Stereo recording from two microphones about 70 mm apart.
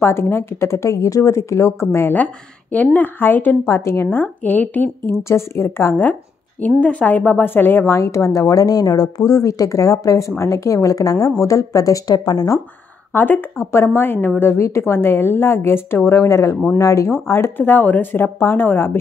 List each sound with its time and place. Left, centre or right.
0.0 s speech: left
2.7 s speech: left
3.7 s speech: left
5.1 s speech: left
6.8 s speech: centre
8.0 s a woman's voice: left
8.3 s a woman's voice: left
13.1 s speech: left
16.2 s a woman's voice: left